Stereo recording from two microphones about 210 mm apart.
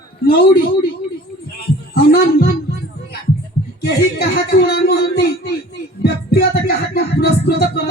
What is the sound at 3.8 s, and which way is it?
Music, 50° left (ahead or behind).